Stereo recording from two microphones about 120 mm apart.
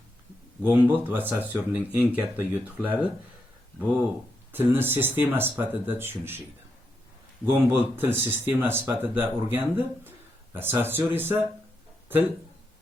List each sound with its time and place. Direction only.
0.6 s speech: 15° right (ahead or behind)
4.5 s speech: 20° right (ahead or behind)
7.4 s speech: 15° right (ahead or behind)